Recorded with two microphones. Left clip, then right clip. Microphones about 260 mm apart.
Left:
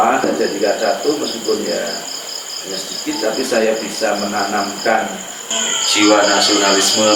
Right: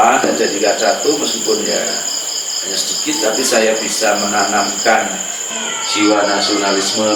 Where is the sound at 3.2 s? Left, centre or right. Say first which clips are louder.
Right 2 dB; centre.